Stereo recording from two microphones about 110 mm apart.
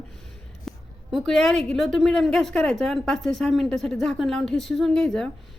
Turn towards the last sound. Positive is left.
turn(degrees=5)  # may be behind; listen again after turning